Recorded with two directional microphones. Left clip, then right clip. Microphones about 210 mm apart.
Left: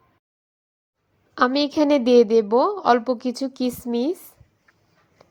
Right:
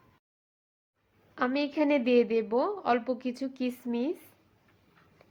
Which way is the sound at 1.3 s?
35° left (ahead or behind).